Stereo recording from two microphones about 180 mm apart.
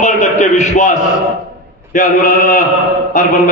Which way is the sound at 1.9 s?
50° left (ahead or behind).